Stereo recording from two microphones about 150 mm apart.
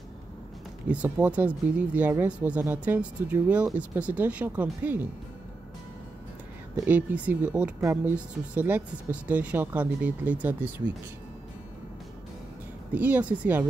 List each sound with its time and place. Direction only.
0.8 s speech: 10° right (ahead or behind)
6.8 s speech: 10° right (ahead or behind)
7.8 s speech: 20° right (ahead or behind)
12.9 s speech: 10° right (ahead or behind)